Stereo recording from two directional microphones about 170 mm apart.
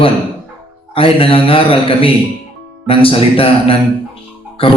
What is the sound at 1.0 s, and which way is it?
A man's voice, 35° left (ahead or behind).